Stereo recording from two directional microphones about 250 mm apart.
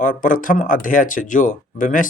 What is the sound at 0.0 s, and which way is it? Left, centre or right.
Speech, left.